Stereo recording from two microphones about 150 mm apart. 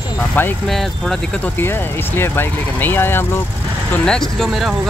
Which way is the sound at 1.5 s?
15° left (ahead or behind).